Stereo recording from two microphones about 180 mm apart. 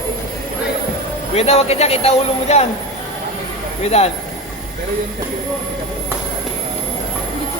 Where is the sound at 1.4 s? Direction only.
35° left (ahead or behind).